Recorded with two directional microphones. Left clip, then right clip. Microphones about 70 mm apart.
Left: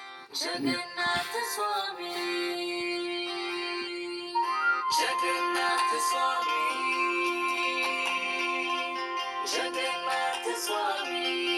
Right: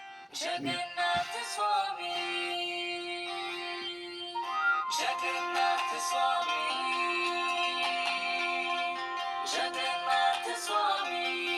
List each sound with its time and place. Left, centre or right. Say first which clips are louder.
0.6 s music: left 2 dB; left
4.4 s music: left 3 dB; left
6.4 s music: left 3 dB; centre
6.8 s music: left 3 dB; centre